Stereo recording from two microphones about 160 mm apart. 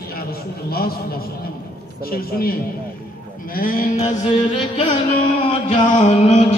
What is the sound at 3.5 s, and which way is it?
Sheep, 60° left (ahead or behind).